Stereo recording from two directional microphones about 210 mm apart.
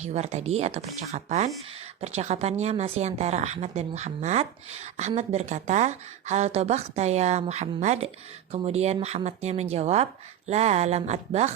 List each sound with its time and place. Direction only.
0.0 s a woman's voice: 30° right (ahead or behind)